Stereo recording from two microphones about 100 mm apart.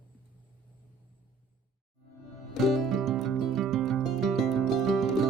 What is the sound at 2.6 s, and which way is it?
Music, centre (ahead or behind).